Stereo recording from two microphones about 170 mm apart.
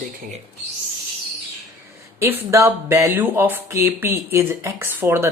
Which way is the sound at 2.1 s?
15° right (ahead or behind).